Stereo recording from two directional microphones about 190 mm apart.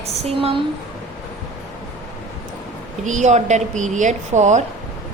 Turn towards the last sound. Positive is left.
turn(degrees=-40)  # may be behind; listen again after turning